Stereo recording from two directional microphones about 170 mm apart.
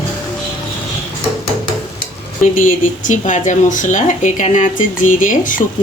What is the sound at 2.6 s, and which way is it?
Speech, 50° left (ahead or behind).